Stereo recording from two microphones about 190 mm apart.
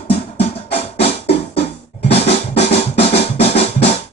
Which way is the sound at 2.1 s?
35° left (ahead or behind).